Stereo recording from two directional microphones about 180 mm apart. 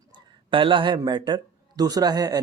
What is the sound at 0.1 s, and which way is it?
Speech, 30° right (ahead or behind).